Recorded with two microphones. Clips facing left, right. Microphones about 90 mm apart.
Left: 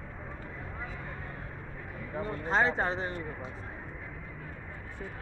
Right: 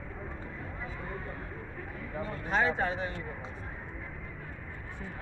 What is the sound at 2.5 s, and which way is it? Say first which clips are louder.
Speech: left 1 dB; 30° left (ahead or behind).